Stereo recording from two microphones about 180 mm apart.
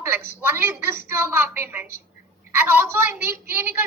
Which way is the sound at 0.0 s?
10° right (ahead or behind).